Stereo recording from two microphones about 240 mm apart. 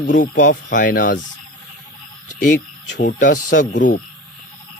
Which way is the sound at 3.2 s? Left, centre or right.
Left.